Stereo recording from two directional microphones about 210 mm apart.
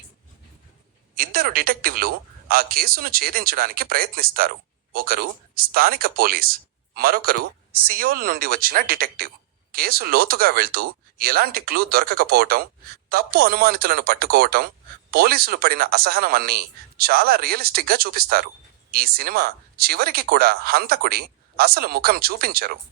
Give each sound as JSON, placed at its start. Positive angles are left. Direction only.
{"t": 1.1, "sound": "speech", "side_deg": -45}